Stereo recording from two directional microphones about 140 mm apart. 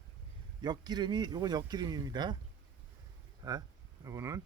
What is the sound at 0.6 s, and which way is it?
Speech, 30° right (ahead or behind).